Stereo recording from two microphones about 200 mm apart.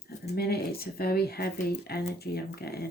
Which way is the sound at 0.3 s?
50° left (ahead or behind).